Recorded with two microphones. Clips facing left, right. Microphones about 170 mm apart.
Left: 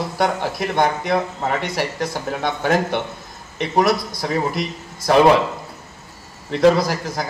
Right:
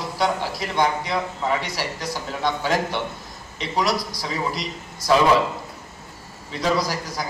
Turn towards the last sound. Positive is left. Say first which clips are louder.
# left 4 dB
turn(degrees=55)  # may be behind; listen again after turning